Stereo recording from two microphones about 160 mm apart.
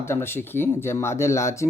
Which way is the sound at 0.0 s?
15° left (ahead or behind).